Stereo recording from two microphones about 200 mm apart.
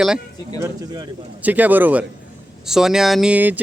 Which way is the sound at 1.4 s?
10° right (ahead or behind).